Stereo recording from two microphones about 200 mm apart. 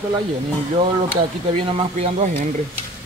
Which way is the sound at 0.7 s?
30° right (ahead or behind).